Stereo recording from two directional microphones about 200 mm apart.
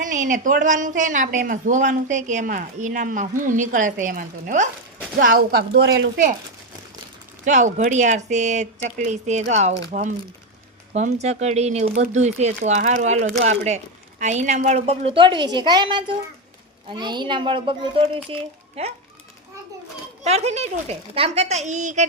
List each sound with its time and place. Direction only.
0.0 s a woman's voice: 40° right (ahead or behind)
7.4 s a woman's voice: 40° right (ahead or behind)
20.2 s a woman's voice: 30° right (ahead or behind)